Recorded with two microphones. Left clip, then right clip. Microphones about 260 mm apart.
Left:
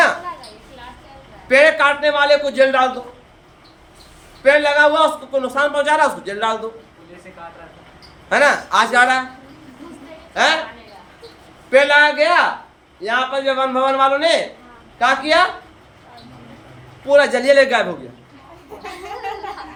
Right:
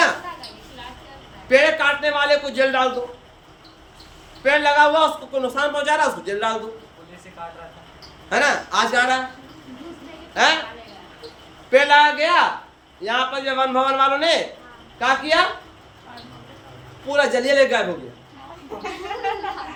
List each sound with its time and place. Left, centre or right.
1.5 s a man's voice: centre
4.4 s a man's voice: centre
8.3 s speech: centre
10.3 s a woman's voice: centre
11.7 s a man's voice: centre
17.1 s speech: centre
18.8 s a woman's voice: left